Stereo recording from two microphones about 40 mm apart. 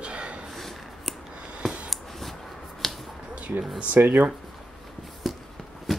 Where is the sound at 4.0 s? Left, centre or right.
Right.